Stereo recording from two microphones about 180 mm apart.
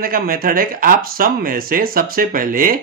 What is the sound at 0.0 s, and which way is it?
Speech, 55° right (ahead or behind).